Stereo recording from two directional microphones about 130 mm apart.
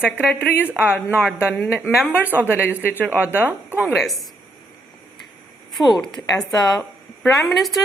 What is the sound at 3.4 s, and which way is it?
Speech, 15° right (ahead or behind).